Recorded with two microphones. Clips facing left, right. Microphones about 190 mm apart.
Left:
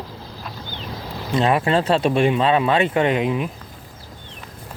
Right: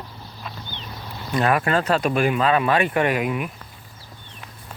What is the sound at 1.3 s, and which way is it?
Speech, 25° left (ahead or behind).